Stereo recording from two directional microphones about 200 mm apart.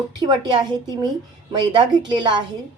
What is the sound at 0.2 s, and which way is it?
Speech, 20° right (ahead or behind).